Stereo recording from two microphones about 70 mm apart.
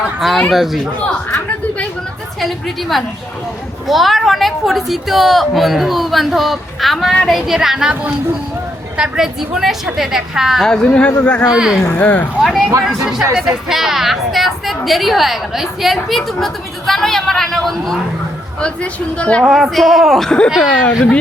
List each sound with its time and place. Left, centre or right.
0.2 s a woman's voice: centre
1.0 s a woman's voice: centre
2.4 s a woman's voice: centre
9.0 s a woman's voice: centre
10.6 s a woman's voice: centre
11.5 s speech: centre
11.9 s speech: left
12.4 s a woman's voice: centre
18.6 s a woman's voice: centre
19.5 s a woman's voice: centre